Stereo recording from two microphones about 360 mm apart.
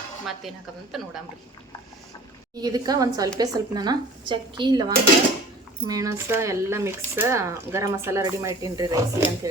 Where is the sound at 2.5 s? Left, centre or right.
Centre.